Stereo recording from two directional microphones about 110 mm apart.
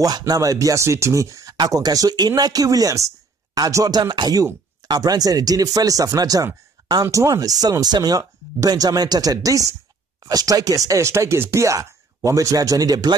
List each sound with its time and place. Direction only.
0.0 s speech: 35° right (ahead or behind)